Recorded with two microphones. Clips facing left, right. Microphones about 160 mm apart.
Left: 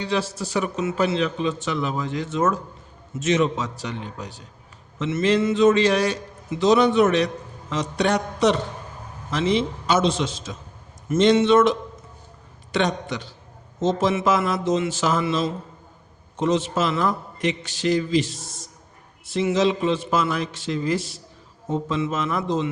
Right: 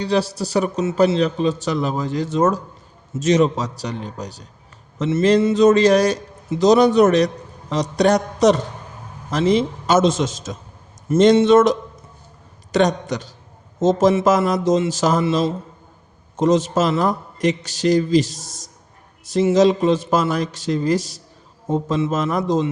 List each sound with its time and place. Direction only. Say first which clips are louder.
0.0 s a man's voice: right 5 dB; 35° right (ahead or behind)